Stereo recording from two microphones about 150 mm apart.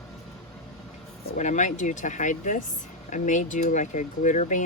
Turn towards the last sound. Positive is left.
turn(degrees=55)  # may be behind; listen again after turning